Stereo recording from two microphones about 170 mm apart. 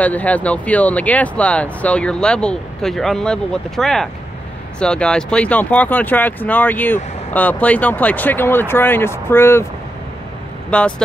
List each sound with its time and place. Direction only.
0.0 s speech: 10° left (ahead or behind)
10.7 s speech: 5° left (ahead or behind)